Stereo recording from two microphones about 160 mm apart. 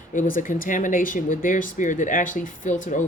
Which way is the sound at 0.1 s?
55° left (ahead or behind).